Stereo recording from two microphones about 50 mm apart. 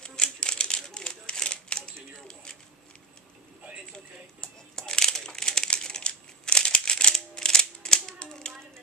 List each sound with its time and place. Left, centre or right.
0.0 s crumpling: centre
3.9 s crumpling: centre